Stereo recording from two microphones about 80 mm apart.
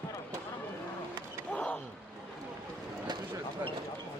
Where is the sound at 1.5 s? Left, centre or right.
Centre.